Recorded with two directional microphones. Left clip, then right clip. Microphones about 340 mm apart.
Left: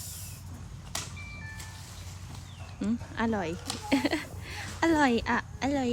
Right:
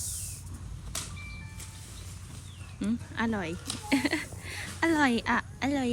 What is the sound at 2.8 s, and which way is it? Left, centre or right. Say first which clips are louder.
A woman's voice: even; centre.